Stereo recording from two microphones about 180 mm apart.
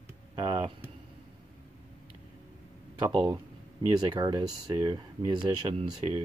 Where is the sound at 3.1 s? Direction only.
10° right (ahead or behind).